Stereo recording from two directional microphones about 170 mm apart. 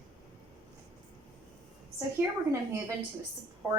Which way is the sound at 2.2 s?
10° right (ahead or behind).